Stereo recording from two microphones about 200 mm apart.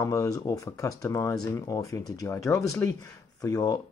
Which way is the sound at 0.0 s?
15° left (ahead or behind).